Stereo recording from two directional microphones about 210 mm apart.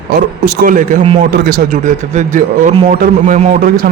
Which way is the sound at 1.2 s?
50° right (ahead or behind).